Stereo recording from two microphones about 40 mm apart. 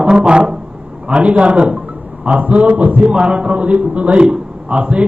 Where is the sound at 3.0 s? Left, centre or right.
Right.